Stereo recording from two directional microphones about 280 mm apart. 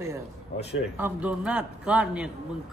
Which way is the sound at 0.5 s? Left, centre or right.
Left.